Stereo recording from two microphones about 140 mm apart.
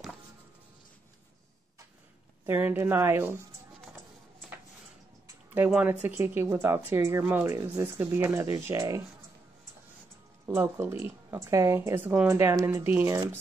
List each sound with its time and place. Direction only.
2.4 s speech: 15° right (ahead or behind)
5.7 s speech: 5° right (ahead or behind); by 9.0 s 25° right (ahead or behind)
10.4 s speech: 20° right (ahead or behind)